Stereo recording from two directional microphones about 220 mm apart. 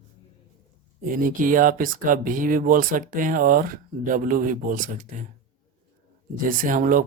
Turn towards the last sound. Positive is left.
turn(degrees=-35)  # may be behind; listen again after turning